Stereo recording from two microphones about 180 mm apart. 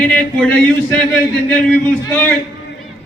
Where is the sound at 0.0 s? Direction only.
10° left (ahead or behind).